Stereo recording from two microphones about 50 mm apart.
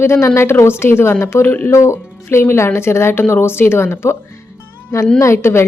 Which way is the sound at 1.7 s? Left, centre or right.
Left.